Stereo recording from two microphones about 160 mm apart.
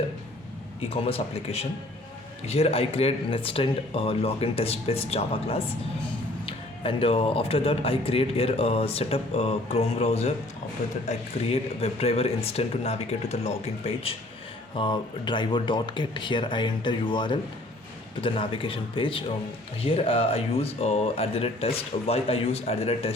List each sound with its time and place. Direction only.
0.8 s speech: 35° left (ahead or behind)